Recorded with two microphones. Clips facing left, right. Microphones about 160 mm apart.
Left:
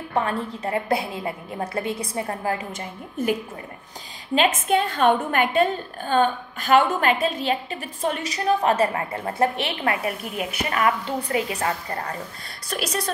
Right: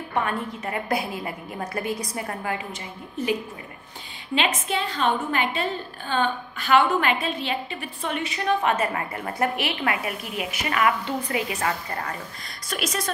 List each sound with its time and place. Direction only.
0.1 s a woman's voice: 30° left (ahead or behind)
3.2 s a woman's voice: 50° left (ahead or behind)
4.4 s a woman's voice: 50° left (ahead or behind); by 13.1 s 30° left (ahead or behind)